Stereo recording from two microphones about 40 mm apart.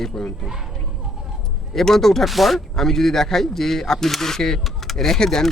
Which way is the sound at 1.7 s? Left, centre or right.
Centre.